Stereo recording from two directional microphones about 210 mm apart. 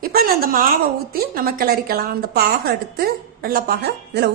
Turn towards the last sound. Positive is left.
turn(degrees=-50)  # may be behind; listen again after turning